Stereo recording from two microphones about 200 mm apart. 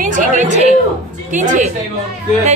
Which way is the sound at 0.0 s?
40° right (ahead or behind).